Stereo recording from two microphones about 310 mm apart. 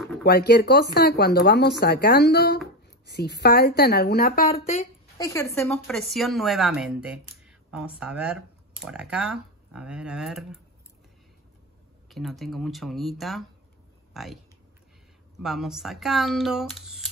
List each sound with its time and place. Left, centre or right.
0.2 s speech: left
5.1 s speech: centre
12.1 s speech: centre
15.4 s speech: centre